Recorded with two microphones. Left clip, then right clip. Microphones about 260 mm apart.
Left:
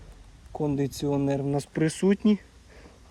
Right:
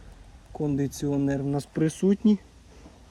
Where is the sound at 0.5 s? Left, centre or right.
Left.